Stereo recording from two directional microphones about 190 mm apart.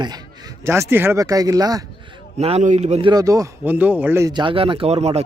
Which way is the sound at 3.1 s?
20° right (ahead or behind).